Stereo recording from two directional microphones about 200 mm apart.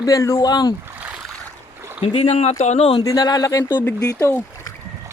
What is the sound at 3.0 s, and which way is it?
Speech, 20° left (ahead or behind).